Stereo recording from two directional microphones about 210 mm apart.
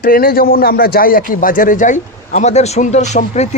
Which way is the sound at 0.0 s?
45° left (ahead or behind).